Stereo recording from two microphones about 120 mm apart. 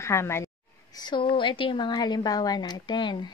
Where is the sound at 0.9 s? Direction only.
40° left (ahead or behind).